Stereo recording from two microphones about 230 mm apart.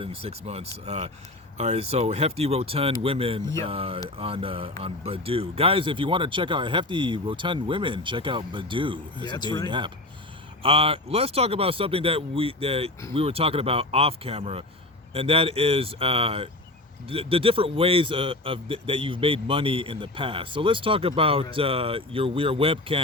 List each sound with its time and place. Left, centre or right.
0.2 s speech: right